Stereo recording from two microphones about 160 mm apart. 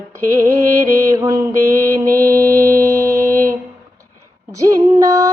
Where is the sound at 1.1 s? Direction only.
20° right (ahead or behind).